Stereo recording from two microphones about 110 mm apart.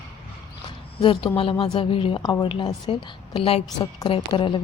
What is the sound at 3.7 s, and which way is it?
Speech, 40° left (ahead or behind).